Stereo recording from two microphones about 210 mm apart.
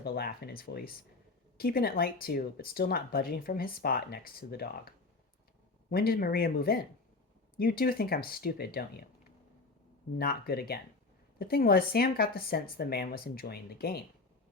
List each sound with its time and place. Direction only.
0.0 s speech: 45° left (ahead or behind)
10.2 s speech: 45° left (ahead or behind)